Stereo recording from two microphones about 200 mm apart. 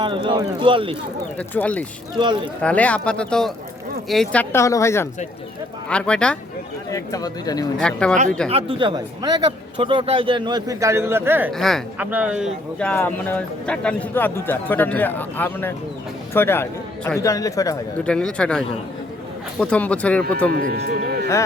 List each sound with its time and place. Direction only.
0.0 s a man's voice: 25° right (ahead or behind)
1.4 s a man's voice: 5° left (ahead or behind)
2.1 s a man's voice: 25° right (ahead or behind)
2.6 s a man's voice: 5° left (ahead or behind)
6.9 s a man's voice: 20° left (ahead or behind)
7.8 s speech: 5° left (ahead or behind)
8.4 s a man's voice: 30° right (ahead or behind); by 11.5 s 10° right (ahead or behind)
11.5 s speech: centre (ahead or behind)
12.9 s a man's voice: 10° left (ahead or behind)
18.0 s a man's voice: 5° left (ahead or behind)
20.5 s speech: 45° right (ahead or behind)